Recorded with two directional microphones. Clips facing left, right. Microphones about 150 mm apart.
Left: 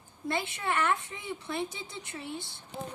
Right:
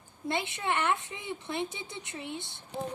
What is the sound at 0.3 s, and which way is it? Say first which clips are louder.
Speech: even; 20° right (ahead or behind).